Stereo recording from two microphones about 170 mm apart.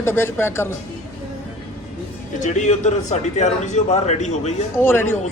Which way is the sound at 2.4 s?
45° left (ahead or behind).